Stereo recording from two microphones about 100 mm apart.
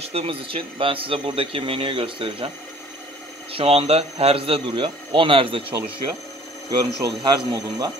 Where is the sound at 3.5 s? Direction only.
80° right; by 5.6 s 60° right (ahead or behind).